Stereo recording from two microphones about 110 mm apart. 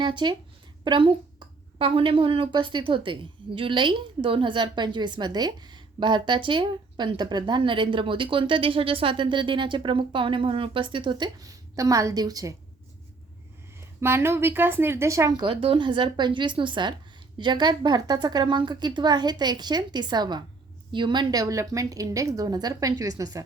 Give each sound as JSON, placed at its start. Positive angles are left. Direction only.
{"t": 0.0, "sound": "a woman's voice", "side_deg": -45}
{"t": 14.0, "sound": "speech", "side_deg": -25}
{"t": 15.3, "sound": "a woman's voice", "side_deg": -40}